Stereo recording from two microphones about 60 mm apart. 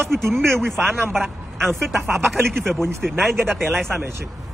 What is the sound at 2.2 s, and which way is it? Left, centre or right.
Speech, right.